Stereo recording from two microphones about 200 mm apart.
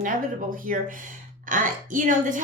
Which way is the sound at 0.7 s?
45° right (ahead or behind).